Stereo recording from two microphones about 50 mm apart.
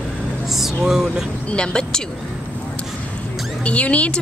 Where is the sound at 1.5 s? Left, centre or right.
Centre.